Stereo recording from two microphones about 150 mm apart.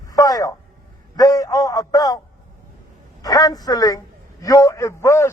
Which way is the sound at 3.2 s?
25° left (ahead or behind).